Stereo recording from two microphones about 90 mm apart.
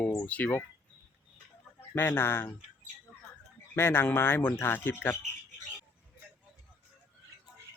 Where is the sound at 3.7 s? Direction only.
25° left (ahead or behind).